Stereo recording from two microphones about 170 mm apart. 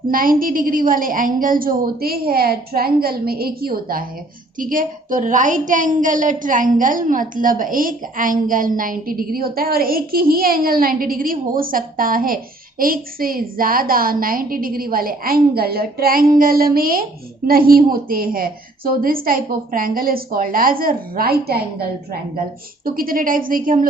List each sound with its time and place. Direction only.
0.1 s a woman's voice: 55° right (ahead or behind)
22.8 s a woman's voice: 55° right (ahead or behind)